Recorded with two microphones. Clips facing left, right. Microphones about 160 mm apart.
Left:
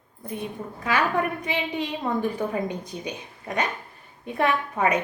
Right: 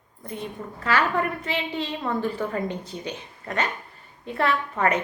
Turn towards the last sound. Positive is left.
turn(degrees=15)  # may be behind; listen again after turning